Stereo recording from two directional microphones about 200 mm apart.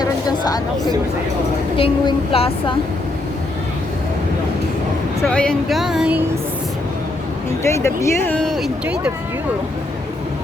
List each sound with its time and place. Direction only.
0.0 s a sound: 20° left (ahead or behind)
1.7 s a woman's voice: 25° left (ahead or behind)
5.2 s speech: 5° left (ahead or behind)
7.7 s speech: 15° left (ahead or behind); by 9.1 s 5° right (ahead or behind)